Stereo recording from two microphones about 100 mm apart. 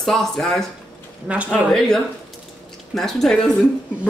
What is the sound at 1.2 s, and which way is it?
Speech, 10° right (ahead or behind).